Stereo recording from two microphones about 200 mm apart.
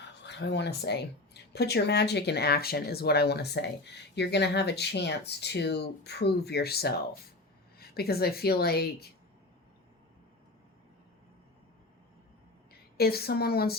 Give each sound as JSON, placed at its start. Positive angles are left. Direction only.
{"t": 0.2, "sound": "a woman's voice", "side_deg": 60}
{"t": 13.0, "sound": "a woman's voice", "side_deg": 50}